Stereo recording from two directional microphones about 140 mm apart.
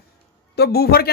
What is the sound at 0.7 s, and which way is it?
Speech, 90° left.